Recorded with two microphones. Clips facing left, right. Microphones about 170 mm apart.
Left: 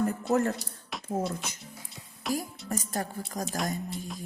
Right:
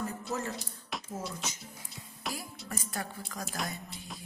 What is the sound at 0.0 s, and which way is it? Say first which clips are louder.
Speech: left 10 dB; 60° left (ahead or behind).